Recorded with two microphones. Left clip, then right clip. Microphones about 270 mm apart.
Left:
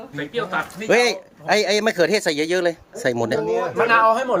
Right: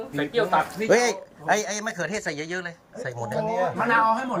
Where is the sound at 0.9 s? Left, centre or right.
Left.